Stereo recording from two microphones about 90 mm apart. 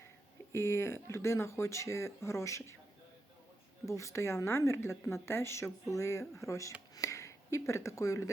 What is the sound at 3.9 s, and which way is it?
Speech, 35° left (ahead or behind).